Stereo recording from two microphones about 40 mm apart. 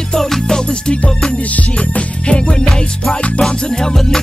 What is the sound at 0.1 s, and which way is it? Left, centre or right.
Music, centre.